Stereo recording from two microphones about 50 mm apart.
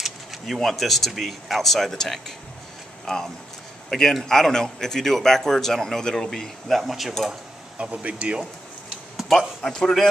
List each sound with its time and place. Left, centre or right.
0.0 s speech: centre
7.7 s speech: right
9.6 s speech: centre